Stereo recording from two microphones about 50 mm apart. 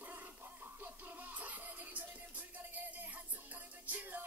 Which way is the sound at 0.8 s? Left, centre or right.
Right.